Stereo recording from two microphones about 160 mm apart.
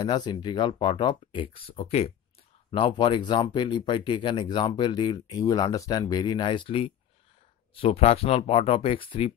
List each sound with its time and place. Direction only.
0.0 s speech: 25° left (ahead or behind)